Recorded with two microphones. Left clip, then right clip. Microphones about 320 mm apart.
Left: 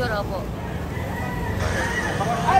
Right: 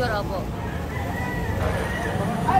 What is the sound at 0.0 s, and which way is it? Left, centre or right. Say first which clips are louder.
Vehicle: even; centre.